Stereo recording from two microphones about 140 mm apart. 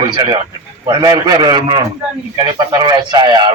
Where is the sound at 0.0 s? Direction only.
30° right (ahead or behind).